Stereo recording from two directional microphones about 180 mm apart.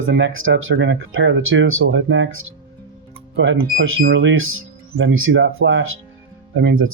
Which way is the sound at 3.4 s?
80° right.